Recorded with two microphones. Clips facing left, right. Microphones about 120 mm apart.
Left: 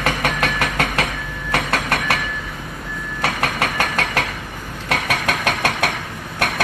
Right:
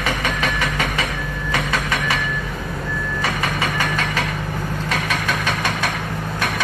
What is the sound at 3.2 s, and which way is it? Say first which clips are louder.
Engine: left 3 dB; 65° left (ahead or behind).